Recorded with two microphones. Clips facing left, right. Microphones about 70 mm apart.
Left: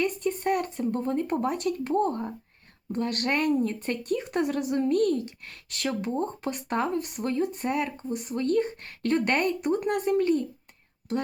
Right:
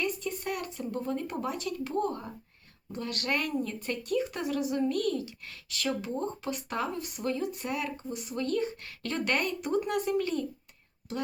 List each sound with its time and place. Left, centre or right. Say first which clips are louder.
0.0 s speech: left 6 dB; left